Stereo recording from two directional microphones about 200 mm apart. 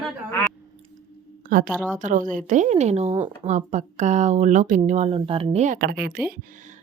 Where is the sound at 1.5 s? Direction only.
45° right (ahead or behind).